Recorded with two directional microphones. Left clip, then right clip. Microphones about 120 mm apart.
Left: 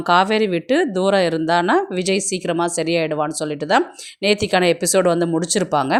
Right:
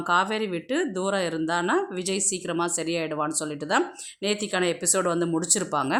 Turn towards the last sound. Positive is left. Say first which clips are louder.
# left 7 dB
turn(degrees=40)  # may be behind; listen again after turning